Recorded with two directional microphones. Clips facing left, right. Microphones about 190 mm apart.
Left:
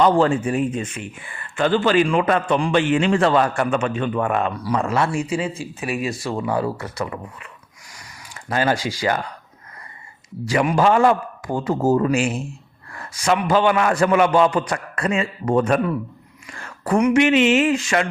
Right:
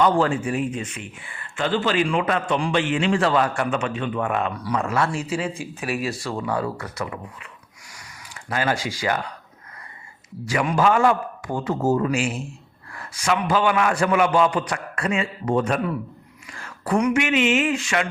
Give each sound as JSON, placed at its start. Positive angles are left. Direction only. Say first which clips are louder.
{"t": 0.0, "sound": "a man's voice", "louder": "left 3 dB", "side_deg": 35}
{"t": 5.5, "sound": "speech", "louder": "left 1 dB", "side_deg": -5}
{"t": 6.2, "sound": "speech", "louder": "left 3 dB", "side_deg": 20}
{"t": 8.4, "sound": "a man's voice", "louder": "left 3 dB", "side_deg": 35}
{"t": 10.4, "sound": "a man's voice", "louder": "left 3 dB", "side_deg": 35}
{"t": 17.0, "sound": "a man's voice", "louder": "left 5 dB", "side_deg": 35}